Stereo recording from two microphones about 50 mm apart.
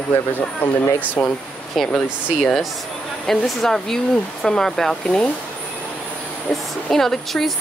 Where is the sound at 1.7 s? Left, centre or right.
Centre.